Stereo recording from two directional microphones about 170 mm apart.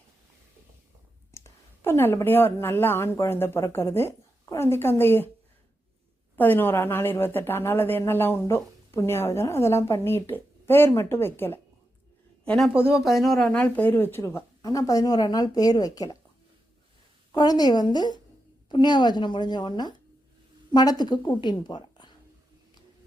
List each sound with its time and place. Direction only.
1.3 s speech: 15° left (ahead or behind)
6.3 s a woman's voice: 10° left (ahead or behind)
12.5 s a woman's voice: centre (ahead or behind); by 16.1 s 20° left (ahead or behind)
17.3 s a woman's voice: 25° left (ahead or behind)